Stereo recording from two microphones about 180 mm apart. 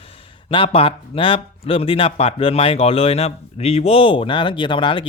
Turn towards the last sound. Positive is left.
turn(degrees=25)  # may be behind; listen again after turning